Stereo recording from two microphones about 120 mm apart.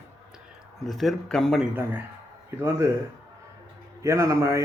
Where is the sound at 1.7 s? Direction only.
15° right (ahead or behind).